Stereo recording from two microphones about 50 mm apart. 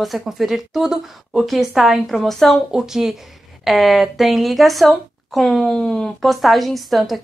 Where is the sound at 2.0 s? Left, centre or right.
Centre.